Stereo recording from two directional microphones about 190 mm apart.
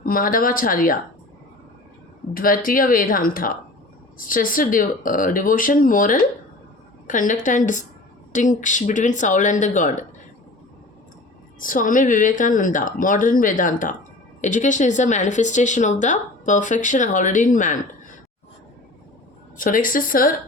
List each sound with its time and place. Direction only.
0.0 s speech: 45° left (ahead or behind)
2.3 s speech: 50° left (ahead or behind)
11.6 s speech: 45° left (ahead or behind)
19.5 s speech: 45° left (ahead or behind)